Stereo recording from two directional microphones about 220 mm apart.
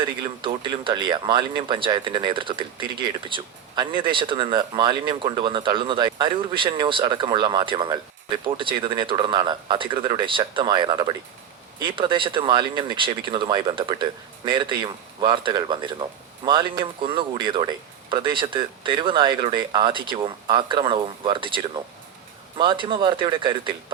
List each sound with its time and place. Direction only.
0.4 s speech: 20° right (ahead or behind)